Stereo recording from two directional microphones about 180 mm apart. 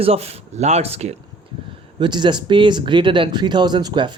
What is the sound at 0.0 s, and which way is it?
Speech, 35° right (ahead or behind).